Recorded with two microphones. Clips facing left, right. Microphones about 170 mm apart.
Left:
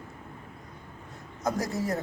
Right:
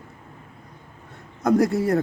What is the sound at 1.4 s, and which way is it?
Speech, 60° right (ahead or behind).